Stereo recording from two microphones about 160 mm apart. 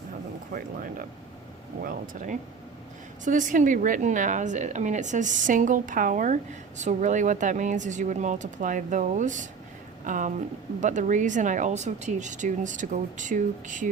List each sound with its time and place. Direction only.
0.5 s a woman's voice: 60° right (ahead or behind)